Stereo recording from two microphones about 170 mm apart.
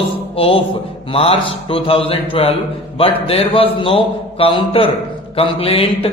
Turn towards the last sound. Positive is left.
turn(degrees=35)  # may be behind; listen again after turning